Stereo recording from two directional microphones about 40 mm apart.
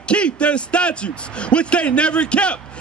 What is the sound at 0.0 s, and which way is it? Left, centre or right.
A man's voice, left.